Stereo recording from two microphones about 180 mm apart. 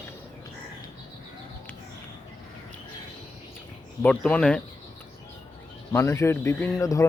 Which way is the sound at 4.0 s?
5° left (ahead or behind).